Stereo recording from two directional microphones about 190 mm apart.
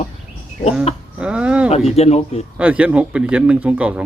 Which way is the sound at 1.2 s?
5° right (ahead or behind).